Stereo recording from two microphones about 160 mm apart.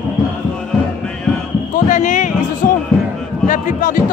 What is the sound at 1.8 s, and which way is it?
Music, 50° left (ahead or behind).